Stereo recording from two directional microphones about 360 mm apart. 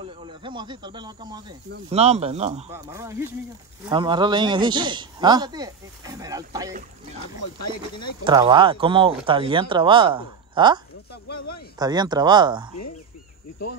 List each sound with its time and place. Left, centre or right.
0.0 s a man's voice: centre
7.3 s speech: left
8.2 s a man's voice: centre
11.2 s speech: left
11.8 s a man's voice: centre